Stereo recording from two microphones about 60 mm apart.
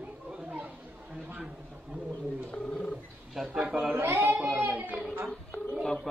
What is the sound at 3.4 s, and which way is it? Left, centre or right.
Speech, centre.